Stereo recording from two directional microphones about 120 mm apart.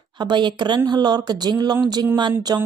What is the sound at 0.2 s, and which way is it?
Speech, 40° right (ahead or behind).